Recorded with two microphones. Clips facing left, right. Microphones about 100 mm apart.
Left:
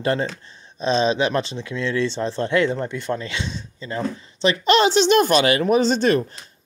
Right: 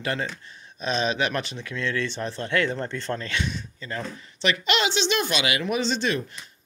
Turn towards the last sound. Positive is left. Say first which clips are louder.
# left 8 dB
turn(degrees=45)  # may be behind; listen again after turning